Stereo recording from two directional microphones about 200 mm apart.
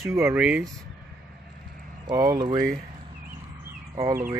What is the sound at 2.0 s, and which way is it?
Speech, 15° right (ahead or behind).